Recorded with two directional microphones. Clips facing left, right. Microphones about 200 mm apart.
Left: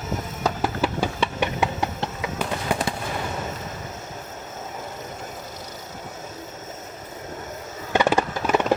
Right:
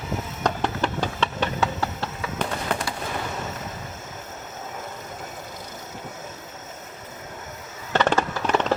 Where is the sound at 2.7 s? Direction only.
10° left (ahead or behind).